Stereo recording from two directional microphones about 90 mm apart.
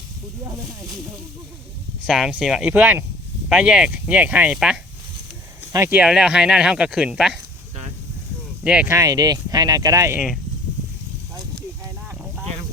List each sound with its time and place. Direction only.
2.0 s speech: 5° right (ahead or behind)
2.6 s speech: 15° right (ahead or behind)
5.9 s speech: 10° right (ahead or behind)
8.6 s speech: 10° right (ahead or behind)
8.9 s speech: 40° right (ahead or behind)